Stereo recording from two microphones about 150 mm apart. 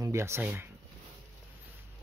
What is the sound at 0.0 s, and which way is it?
Speech, 20° right (ahead or behind).